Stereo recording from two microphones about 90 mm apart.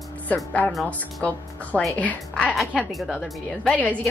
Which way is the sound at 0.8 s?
15° left (ahead or behind).